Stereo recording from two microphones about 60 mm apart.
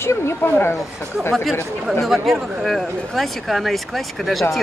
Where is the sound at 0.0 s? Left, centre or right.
Left.